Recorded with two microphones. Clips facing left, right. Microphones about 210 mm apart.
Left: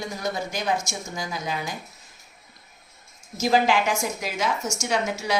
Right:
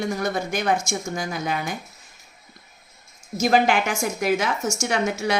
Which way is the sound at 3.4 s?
60° right (ahead or behind).